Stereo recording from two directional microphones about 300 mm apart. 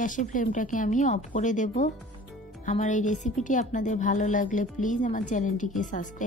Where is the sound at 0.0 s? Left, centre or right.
Left.